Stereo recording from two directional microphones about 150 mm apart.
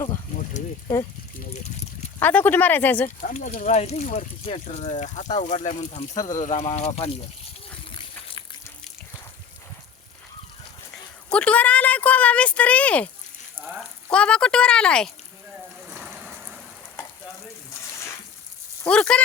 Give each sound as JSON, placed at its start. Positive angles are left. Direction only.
{"t": 2.1, "sound": "speech", "side_deg": 10}
{"t": 3.2, "sound": "speech", "side_deg": 60}
{"t": 7.9, "sound": "a sound", "side_deg": 35}
{"t": 11.3, "sound": "speech", "side_deg": 5}
{"t": 13.6, "sound": "frying", "side_deg": -15}
{"t": 14.1, "sound": "speech", "side_deg": 5}
{"t": 17.0, "sound": "frying", "side_deg": 15}
{"t": 18.9, "sound": "speech", "side_deg": 5}